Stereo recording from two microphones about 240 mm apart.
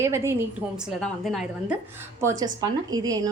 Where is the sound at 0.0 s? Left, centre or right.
Centre.